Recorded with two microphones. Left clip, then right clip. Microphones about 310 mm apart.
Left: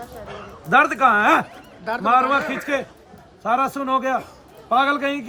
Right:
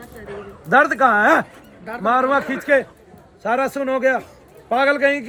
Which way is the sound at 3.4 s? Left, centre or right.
Left.